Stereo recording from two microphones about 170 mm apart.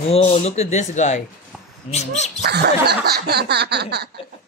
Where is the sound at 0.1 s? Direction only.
40° left (ahead or behind).